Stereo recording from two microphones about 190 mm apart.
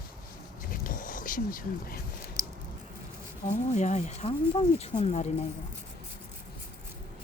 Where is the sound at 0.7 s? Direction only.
45° left (ahead or behind).